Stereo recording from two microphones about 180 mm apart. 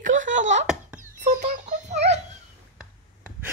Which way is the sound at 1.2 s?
45° right (ahead or behind).